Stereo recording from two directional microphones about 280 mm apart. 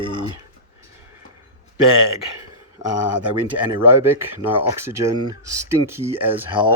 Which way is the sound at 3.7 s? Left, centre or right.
Centre.